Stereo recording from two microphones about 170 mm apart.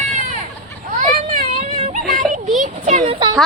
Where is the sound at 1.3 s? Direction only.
45° right (ahead or behind).